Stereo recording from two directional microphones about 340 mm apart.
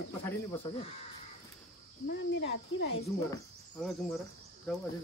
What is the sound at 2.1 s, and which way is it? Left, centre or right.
Speech, left.